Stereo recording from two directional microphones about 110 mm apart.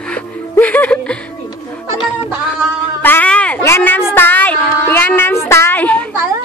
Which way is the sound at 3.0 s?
15° left (ahead or behind).